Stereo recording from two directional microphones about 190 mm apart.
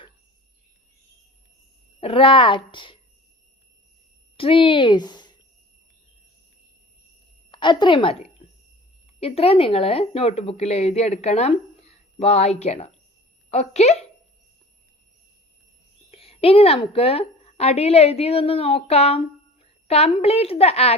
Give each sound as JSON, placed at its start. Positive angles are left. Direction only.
{"t": 2.0, "sound": "speech", "side_deg": 30}
{"t": 4.4, "sound": "speech", "side_deg": 30}
{"t": 7.5, "sound": "a woman's voice", "side_deg": 25}
{"t": 8.4, "sound": "a sound", "side_deg": 35}
{"t": 9.2, "sound": "speech", "side_deg": 30}
{"t": 16.1, "sound": "a woman's voice", "side_deg": 30}